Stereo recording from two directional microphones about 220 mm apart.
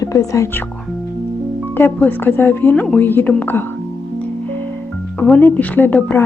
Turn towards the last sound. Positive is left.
turn(degrees=10)  # may be behind; listen again after turning